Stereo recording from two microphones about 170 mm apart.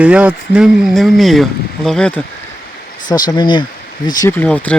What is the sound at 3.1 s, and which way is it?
Speech, 25° left (ahead or behind).